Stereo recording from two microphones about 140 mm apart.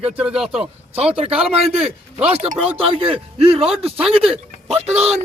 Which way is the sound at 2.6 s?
45° right (ahead or behind).